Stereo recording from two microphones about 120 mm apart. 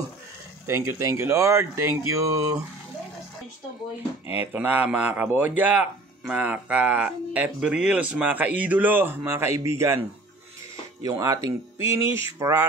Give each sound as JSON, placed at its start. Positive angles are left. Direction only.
{"t": 0.7, "sound": "speech", "side_deg": -20}
{"t": 4.3, "sound": "speech", "side_deg": -15}
{"t": 11.1, "sound": "speech", "side_deg": -30}